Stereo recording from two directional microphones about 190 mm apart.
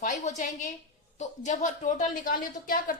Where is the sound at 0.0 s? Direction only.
40° left (ahead or behind).